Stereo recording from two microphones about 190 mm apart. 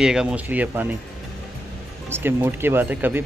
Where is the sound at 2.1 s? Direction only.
10° right (ahead or behind).